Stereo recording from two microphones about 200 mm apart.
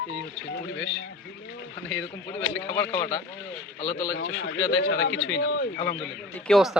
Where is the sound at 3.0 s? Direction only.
55° left (ahead or behind).